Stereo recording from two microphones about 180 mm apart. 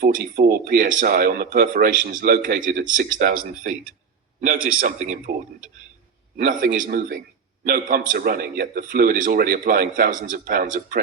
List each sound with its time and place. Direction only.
0.0 s speech: 55° right (ahead or behind)
6.3 s speech: 50° right (ahead or behind)